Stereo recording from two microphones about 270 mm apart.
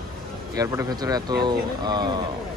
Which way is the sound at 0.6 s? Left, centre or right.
Centre.